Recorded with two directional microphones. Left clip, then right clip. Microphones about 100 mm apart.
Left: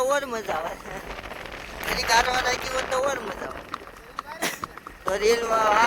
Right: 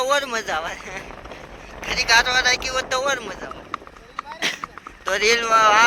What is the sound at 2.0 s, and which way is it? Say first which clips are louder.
Speech: right 5 dB; 45° left (ahead or behind).